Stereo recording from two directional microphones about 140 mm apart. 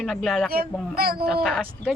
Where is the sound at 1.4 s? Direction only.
Centre (ahead or behind).